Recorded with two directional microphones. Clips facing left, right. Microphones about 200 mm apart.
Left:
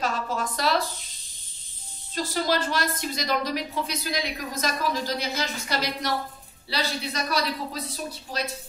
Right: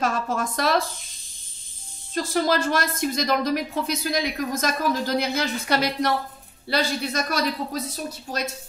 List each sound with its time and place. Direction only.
0.0 s speech: 45° right (ahead or behind)
2.1 s speech: 50° right (ahead or behind)